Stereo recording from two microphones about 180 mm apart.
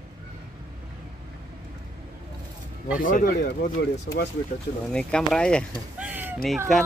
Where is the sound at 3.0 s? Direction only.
50° left (ahead or behind).